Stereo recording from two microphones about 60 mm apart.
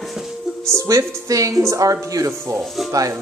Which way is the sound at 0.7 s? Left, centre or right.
Right.